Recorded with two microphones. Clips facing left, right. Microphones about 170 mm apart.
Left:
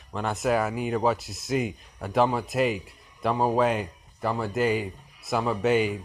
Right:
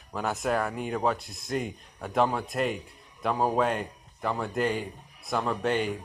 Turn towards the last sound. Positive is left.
turn(degrees=5)  # may be behind; listen again after turning